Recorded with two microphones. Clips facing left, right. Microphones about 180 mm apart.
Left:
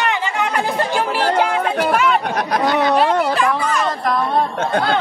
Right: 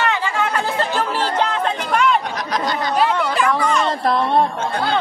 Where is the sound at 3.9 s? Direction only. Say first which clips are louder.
Right 1 dB; 30° right (ahead or behind).